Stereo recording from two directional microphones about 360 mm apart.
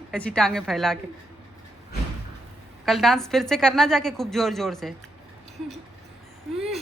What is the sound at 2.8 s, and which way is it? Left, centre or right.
A woman's voice, centre.